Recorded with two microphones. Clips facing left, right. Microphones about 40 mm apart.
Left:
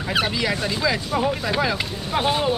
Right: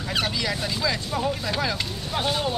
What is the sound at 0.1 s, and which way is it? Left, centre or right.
Speech, centre.